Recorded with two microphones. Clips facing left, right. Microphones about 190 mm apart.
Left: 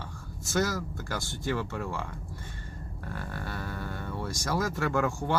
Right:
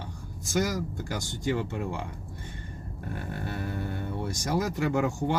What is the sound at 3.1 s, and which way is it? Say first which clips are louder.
Speech: right 3 dB; 20° right (ahead or behind).